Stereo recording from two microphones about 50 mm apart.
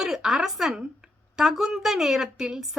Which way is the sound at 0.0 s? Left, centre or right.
Centre.